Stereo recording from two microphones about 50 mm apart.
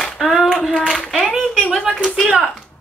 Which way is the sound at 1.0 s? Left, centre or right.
Centre.